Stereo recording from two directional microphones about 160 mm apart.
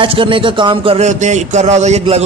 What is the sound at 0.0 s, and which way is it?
A man's voice, 35° right (ahead or behind).